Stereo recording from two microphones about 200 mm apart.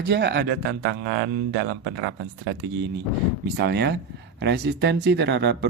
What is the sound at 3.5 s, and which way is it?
Speech, 55° right (ahead or behind).